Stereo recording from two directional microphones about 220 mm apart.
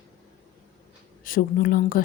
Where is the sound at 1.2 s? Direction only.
40° left (ahead or behind).